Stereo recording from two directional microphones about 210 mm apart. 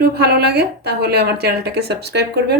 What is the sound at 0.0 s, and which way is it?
A woman's voice, 50° right (ahead or behind).